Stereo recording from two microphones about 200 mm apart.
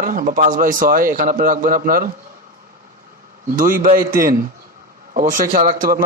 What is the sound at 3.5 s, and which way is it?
A man's voice, 40° right (ahead or behind).